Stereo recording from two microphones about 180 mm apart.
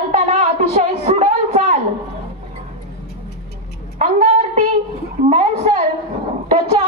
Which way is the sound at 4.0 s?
45° right (ahead or behind).